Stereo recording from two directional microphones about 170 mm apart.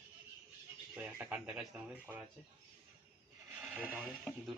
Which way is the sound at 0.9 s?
10° right (ahead or behind).